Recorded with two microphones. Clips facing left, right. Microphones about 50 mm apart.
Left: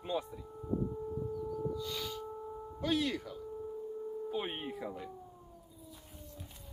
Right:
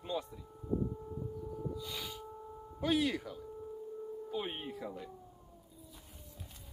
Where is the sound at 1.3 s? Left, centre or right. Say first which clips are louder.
Left 4 dB; left.